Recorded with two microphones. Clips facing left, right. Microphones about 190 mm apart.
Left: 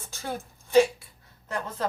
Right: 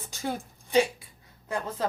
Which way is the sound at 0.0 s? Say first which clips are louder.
Right 2 dB; 15° right (ahead or behind).